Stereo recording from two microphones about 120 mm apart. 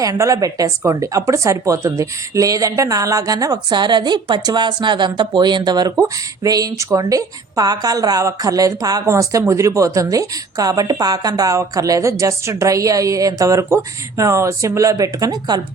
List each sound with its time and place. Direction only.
0.0 s speech: 30° right (ahead or behind)